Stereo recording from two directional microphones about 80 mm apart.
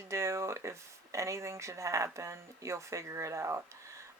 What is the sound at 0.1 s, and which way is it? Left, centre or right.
Speech, right.